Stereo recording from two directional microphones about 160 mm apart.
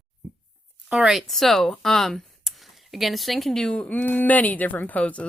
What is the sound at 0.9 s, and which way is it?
Speech, 5° right (ahead or behind).